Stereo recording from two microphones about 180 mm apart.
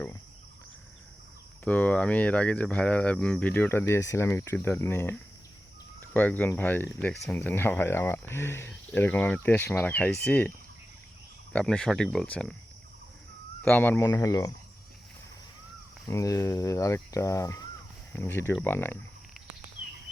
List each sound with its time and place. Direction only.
1.6 s speech: 5° left (ahead or behind)
11.5 s speech: 5° left (ahead or behind)
13.6 s speech: 10° left (ahead or behind)
16.0 s speech: 15° left (ahead or behind)